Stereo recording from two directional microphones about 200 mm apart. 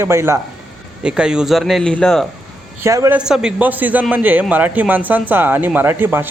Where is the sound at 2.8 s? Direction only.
15° right (ahead or behind).